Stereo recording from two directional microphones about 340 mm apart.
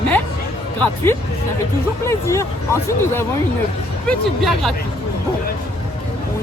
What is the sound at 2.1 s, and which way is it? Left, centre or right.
Speech, centre.